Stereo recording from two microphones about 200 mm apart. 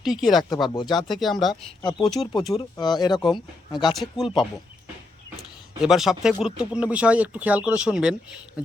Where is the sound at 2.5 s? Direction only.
20° left (ahead or behind).